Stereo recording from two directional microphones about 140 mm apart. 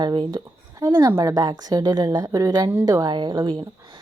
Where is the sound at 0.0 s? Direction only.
30° right (ahead or behind).